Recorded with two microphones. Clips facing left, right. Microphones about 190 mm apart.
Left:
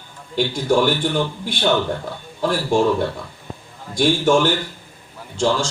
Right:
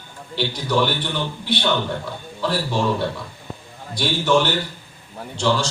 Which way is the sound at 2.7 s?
50° left (ahead or behind).